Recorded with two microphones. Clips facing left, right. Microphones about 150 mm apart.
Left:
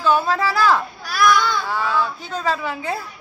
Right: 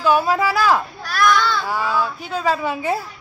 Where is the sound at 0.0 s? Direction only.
10° right (ahead or behind).